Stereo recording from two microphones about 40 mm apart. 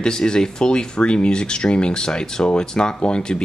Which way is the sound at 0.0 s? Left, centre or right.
Centre.